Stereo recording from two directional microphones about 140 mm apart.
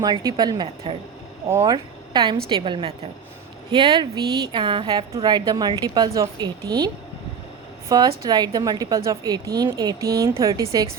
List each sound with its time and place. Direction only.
0.0 s a woman's voice: 25° right (ahead or behind)